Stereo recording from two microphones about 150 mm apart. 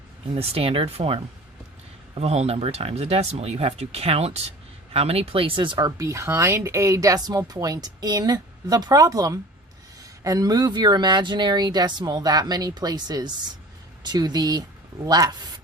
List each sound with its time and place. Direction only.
0.3 s speech: 40° right (ahead or behind)